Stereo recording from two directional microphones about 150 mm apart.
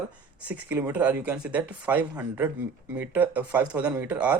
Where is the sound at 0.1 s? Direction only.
10° right (ahead or behind).